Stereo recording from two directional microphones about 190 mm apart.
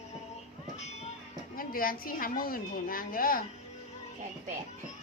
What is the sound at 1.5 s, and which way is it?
A woman's voice, 50° left (ahead or behind).